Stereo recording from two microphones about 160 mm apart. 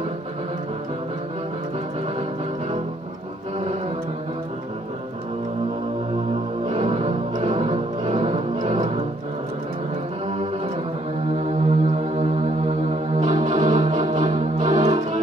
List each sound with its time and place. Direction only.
6.7 s music: 40° right (ahead or behind)
11.3 s music: 45° right (ahead or behind)